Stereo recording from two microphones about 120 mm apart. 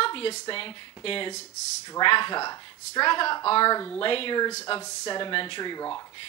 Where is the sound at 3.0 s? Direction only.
45° left (ahead or behind).